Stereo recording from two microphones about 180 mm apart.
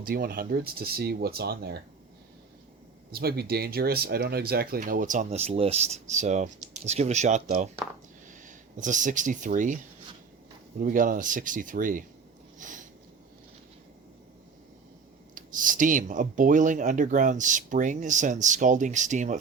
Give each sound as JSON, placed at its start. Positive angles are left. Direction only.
{"t": 0.0, "sound": "speech", "side_deg": -55}
{"t": 3.1, "sound": "speech", "side_deg": -60}
{"t": 7.4, "sound": "speech", "side_deg": -50}
{"t": 10.8, "sound": "speech", "side_deg": -50}
{"t": 12.5, "sound": "a sound", "side_deg": -45}
{"t": 15.4, "sound": "speech", "side_deg": -45}